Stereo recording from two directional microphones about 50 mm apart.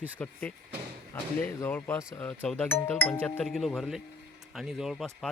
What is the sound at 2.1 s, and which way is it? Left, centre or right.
Speech, left.